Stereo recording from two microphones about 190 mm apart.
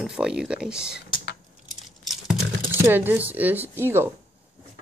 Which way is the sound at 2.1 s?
Centre (ahead or behind).